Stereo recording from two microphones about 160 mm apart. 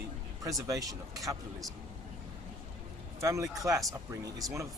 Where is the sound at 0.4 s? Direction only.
20° right (ahead or behind).